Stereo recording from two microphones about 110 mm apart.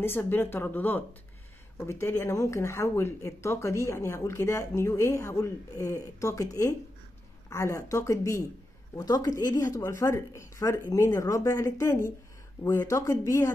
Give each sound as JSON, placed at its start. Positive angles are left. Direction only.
{"t": 0.0, "sound": "a woman's voice", "side_deg": 20}
{"t": 9.5, "sound": "speech", "side_deg": 25}